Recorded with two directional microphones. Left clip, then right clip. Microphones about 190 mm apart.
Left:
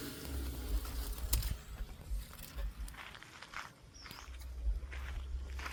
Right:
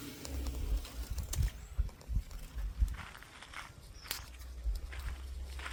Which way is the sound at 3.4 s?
10° right (ahead or behind).